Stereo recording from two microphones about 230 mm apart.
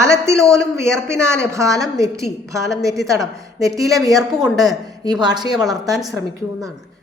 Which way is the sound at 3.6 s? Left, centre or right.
Centre.